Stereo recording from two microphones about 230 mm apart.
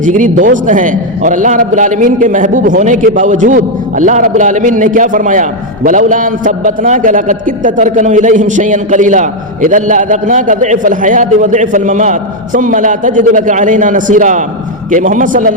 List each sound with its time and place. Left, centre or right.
0.0 s a man's voice: right